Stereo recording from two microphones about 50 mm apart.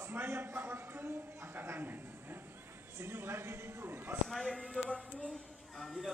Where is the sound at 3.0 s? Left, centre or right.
Right.